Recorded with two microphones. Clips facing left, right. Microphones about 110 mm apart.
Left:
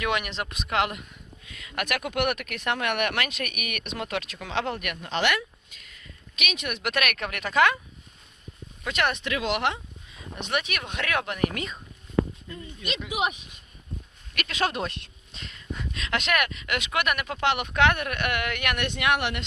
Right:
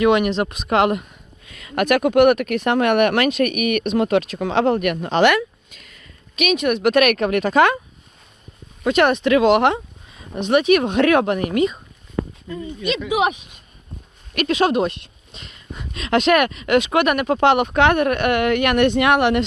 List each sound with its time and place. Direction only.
0.0 s speech: 30° right (ahead or behind); by 5.4 s 55° right (ahead or behind)
5.4 s a sound: 60° right (ahead or behind)
6.3 s speech: 50° right (ahead or behind)
8.8 s speech: 35° right (ahead or behind); by 10.2 s 50° right (ahead or behind)
10.4 s speech: 25° right (ahead or behind)
11.5 s speech: 10° right (ahead or behind)
14.3 s speech: 30° right (ahead or behind)
14.6 s a sound: 15° right (ahead or behind)
16.0 s speech: 25° right (ahead or behind); by 19.5 s 40° right (ahead or behind)